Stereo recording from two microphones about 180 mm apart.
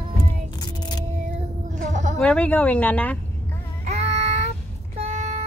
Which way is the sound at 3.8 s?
35° right (ahead or behind).